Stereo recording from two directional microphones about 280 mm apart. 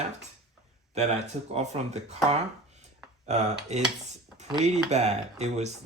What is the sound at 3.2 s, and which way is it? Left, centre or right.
Speech, right.